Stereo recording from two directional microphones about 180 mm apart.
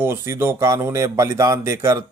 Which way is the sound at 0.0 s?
15° right (ahead or behind).